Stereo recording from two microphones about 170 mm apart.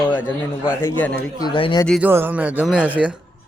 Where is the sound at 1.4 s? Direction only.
30° left (ahead or behind).